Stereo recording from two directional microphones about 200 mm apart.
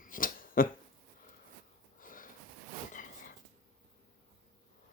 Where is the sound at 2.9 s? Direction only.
40° left (ahead or behind).